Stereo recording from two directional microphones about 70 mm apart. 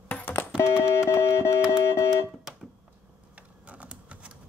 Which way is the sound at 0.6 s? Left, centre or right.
Left.